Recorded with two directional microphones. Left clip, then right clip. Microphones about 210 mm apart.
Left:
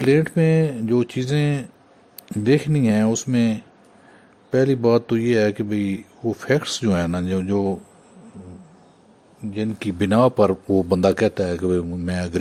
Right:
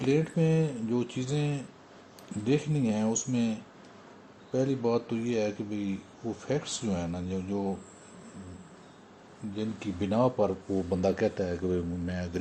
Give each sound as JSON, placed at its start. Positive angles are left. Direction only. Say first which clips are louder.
{"t": 0.0, "sound": "speech", "louder": "left 10 dB", "side_deg": 55}
{"t": 9.6, "sound": "a man's voice", "louder": "left 10 dB", "side_deg": 55}